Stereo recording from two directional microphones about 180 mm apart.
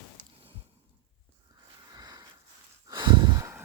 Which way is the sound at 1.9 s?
20° right (ahead or behind).